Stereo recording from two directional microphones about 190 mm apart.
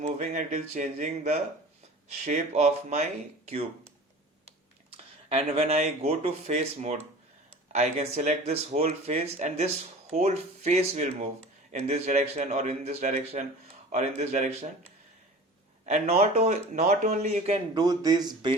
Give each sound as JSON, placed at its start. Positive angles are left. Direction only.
{"t": 0.0, "sound": "speech", "side_deg": -40}
{"t": 4.9, "sound": "speech", "side_deg": -30}
{"t": 15.9, "sound": "speech", "side_deg": -35}
{"t": 17.7, "sound": "speech", "side_deg": -20}